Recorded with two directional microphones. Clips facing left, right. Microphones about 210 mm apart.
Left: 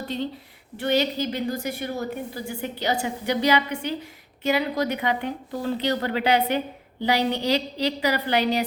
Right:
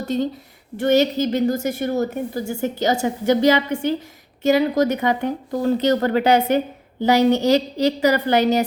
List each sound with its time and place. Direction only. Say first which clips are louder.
0.0 s a woman's voice: right 7 dB; 45° right (ahead or behind)